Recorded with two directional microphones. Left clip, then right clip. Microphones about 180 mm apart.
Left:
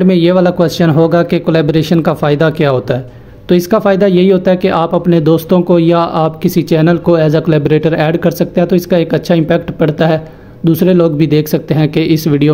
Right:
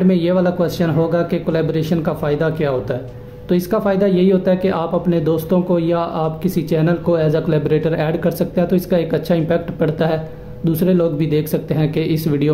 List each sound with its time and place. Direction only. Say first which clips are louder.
0.0 s speech: left 7 dB; 40° left (ahead or behind)